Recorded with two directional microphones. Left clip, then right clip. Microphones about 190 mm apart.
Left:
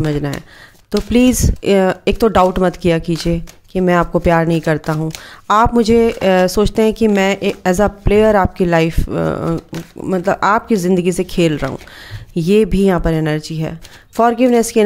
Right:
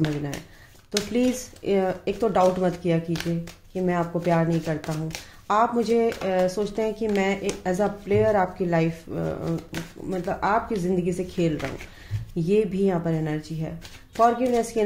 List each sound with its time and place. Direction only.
1.1 s speech: 45° left (ahead or behind)